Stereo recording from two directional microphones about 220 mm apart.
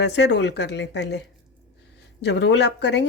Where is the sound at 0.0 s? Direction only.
50° left (ahead or behind).